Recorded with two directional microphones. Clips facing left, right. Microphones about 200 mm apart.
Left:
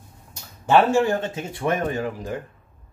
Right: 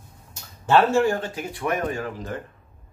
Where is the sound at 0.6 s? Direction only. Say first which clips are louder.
Left 1 dB; 15° left (ahead or behind).